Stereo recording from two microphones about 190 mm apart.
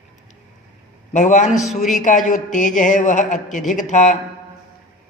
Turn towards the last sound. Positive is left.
turn(degrees=40)  # may be behind; listen again after turning